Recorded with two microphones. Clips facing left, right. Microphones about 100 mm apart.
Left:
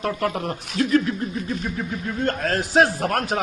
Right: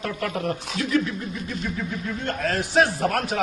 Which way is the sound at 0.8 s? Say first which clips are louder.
Left 8 dB; 50° left (ahead or behind).